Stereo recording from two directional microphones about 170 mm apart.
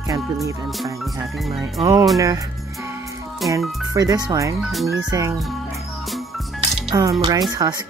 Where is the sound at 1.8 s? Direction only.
20° right (ahead or behind).